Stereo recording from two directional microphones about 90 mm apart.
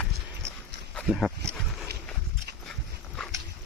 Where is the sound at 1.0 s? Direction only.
5° left (ahead or behind).